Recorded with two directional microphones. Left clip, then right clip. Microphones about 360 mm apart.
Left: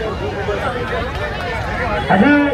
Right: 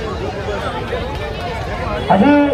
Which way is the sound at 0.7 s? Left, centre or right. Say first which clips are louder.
Left 1 dB; centre.